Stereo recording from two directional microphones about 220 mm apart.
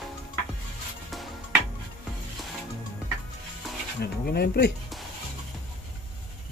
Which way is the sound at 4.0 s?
45° left (ahead or behind).